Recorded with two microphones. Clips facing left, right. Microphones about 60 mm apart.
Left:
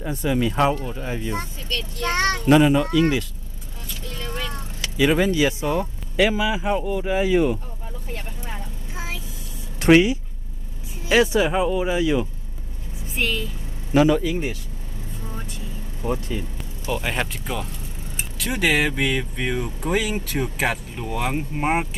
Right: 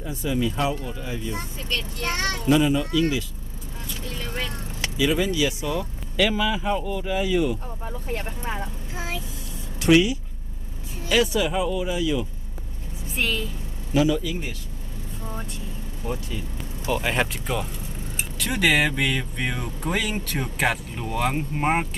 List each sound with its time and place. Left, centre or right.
0.0 s speech: left
2.5 s speech: left
4.9 s speech: left
6.1 s speech: centre; by 7.6 s left
8.1 s speech: right
9.8 s speech: left
13.1 s speech: centre
13.9 s speech: left
16.0 s speech: left
16.9 s speech: centre